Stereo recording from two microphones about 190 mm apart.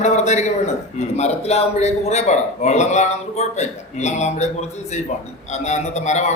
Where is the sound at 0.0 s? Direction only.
40° left (ahead or behind).